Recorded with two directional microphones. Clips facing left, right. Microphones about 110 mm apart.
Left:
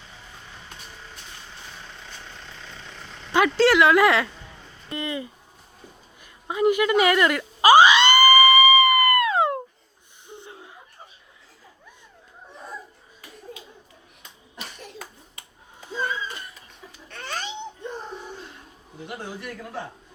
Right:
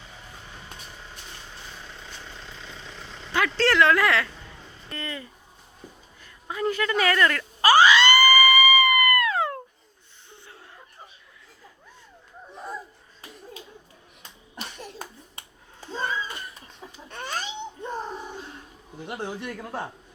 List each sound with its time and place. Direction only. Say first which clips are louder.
2.0 s vehicle: even; centre (ahead or behind)
3.3 s speech: left 4 dB; 15° left (ahead or behind)
6.2 s screaming: left 6 dB; 15° left (ahead or behind)
10.2 s wheeze: left 6 dB; 20° left (ahead or behind)
17.1 s babbling: even; 15° right (ahead or behind)